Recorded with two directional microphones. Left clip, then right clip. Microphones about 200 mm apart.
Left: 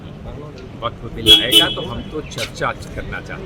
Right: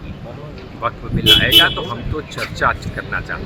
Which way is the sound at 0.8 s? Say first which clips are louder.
Even; 15° left (ahead or behind).